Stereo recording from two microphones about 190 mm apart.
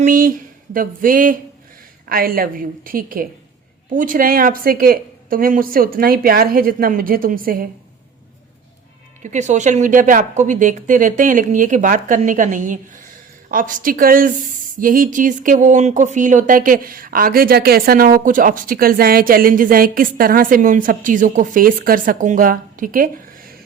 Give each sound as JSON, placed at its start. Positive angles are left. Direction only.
{"t": 0.0, "sound": "a sound", "side_deg": -45}
{"t": 2.0, "sound": "speech", "side_deg": -50}
{"t": 9.2, "sound": "speech", "side_deg": -40}